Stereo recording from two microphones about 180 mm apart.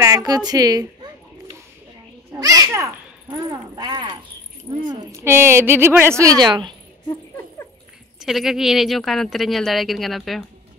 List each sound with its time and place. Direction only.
0.3 s a woman's voice: 20° right (ahead or behind)
2.4 s a child's voice: 20° right (ahead or behind)
6.4 s a woman's voice: 25° right (ahead or behind)
8.2 s speech: centre (ahead or behind)